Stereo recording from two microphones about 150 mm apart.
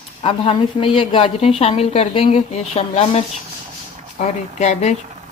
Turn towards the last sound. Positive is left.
turn(degrees=50)  # may be behind; listen again after turning